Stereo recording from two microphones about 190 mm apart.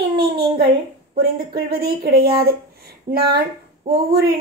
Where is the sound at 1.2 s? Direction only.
55° right (ahead or behind).